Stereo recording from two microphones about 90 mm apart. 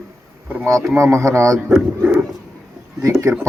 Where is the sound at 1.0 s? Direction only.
35° right (ahead or behind).